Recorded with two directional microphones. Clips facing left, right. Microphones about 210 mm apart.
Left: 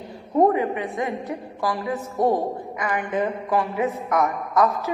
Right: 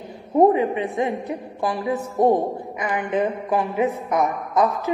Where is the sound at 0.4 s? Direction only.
20° right (ahead or behind).